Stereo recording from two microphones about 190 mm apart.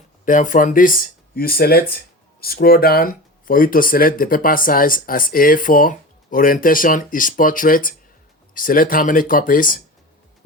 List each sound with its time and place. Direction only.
0.3 s speech: 45° left (ahead or behind)